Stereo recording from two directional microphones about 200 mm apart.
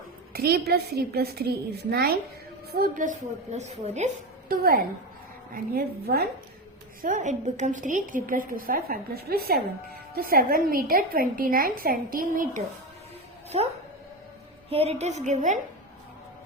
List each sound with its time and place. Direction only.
0.3 s a woman's voice: 50° right (ahead or behind); by 4.1 s 35° right (ahead or behind)
4.4 s a woman's voice: 45° right (ahead or behind)
14.7 s a woman's voice: 30° right (ahead or behind)